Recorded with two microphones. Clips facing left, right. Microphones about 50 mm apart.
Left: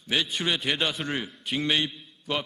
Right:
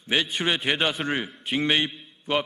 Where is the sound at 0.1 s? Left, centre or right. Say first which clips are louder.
Right 2 dB; right.